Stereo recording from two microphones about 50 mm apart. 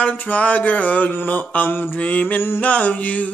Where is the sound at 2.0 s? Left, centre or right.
Left.